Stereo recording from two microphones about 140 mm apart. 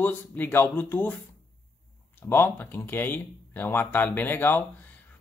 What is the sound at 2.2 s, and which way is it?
Speech, 15° left (ahead or behind).